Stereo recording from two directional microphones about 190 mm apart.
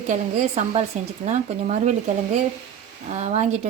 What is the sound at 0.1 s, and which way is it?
Speech, 35° right (ahead or behind).